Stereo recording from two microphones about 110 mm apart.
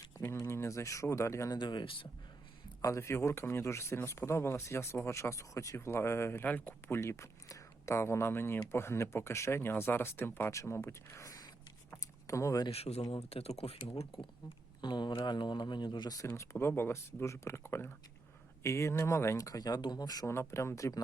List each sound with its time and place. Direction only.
0.1 s speech: 25° left (ahead or behind)
1.5 s speech: 45° left (ahead or behind)
2.8 s speech: 25° left (ahead or behind)
12.7 s speech: 70° left (ahead or behind)
14.8 s speech: 45° left (ahead or behind)
16.2 s speech: 25° left (ahead or behind)
20.3 s speech: 25° left (ahead or behind)